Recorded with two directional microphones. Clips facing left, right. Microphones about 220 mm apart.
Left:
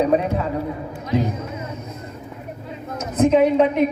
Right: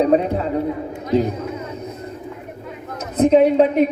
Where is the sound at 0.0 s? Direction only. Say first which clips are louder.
Right 2 dB; 30° right (ahead or behind).